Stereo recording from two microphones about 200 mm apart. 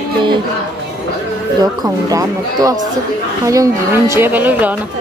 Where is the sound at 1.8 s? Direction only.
15° right (ahead or behind).